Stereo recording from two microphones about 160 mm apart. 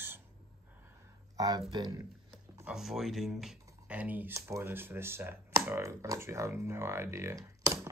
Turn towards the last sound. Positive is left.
turn(degrees=-20)  # may be behind; listen again after turning